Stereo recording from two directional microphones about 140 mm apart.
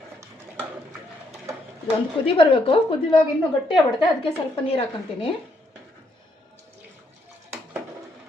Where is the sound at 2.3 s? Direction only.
40° left (ahead or behind).